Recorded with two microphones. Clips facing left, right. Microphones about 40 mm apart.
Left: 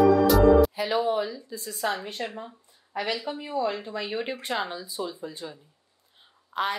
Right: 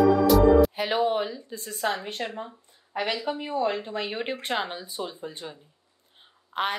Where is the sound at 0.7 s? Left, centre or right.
Right.